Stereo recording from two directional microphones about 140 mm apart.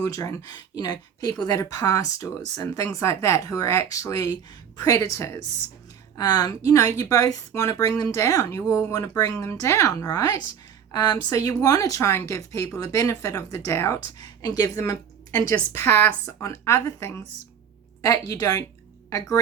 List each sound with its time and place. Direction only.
0.0 s speech: 20° left (ahead or behind)